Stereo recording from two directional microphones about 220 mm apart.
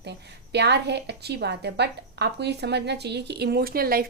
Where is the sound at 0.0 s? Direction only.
50° right (ahead or behind).